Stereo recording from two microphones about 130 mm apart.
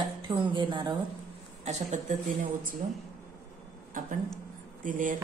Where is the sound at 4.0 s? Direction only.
90° right.